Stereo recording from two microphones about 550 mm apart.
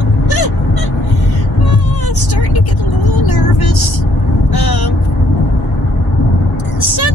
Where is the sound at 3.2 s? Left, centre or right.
Left.